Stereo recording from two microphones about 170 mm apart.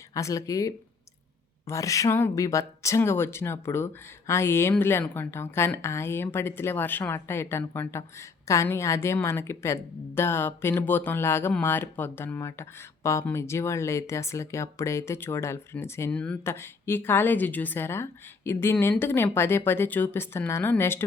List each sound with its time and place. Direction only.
0.1 s a woman's voice: 20° left (ahead or behind)